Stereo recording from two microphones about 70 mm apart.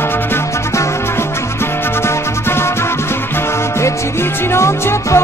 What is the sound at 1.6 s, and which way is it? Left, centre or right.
Music, left.